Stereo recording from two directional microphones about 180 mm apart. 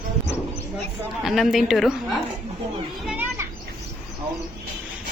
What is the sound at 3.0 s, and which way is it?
Children playing, 10° right (ahead or behind).